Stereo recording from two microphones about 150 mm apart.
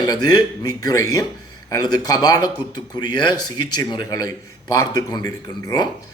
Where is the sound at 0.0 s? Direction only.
25° left (ahead or behind).